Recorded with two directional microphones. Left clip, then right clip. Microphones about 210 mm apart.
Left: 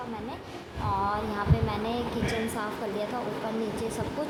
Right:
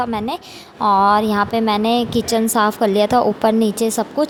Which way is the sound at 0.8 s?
50° right (ahead or behind).